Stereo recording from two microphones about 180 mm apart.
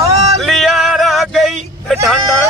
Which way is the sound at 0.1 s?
35° right (ahead or behind).